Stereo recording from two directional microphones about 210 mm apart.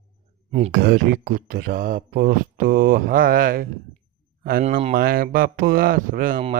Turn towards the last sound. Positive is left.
turn(degrees=-40)  # may be behind; listen again after turning